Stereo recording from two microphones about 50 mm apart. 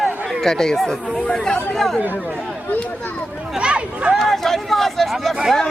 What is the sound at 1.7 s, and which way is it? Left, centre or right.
Chatter, centre.